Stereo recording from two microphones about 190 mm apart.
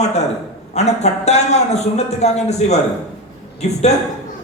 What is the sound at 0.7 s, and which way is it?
A man's voice, 35° left (ahead or behind).